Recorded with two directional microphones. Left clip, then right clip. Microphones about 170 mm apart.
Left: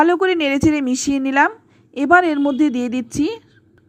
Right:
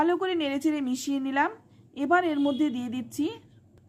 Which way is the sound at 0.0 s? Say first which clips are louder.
Left 10 dB; 35° left (ahead or behind).